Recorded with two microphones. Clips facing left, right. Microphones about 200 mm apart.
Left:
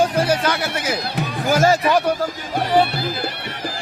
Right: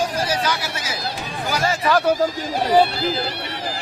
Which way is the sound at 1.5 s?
45° left (ahead or behind).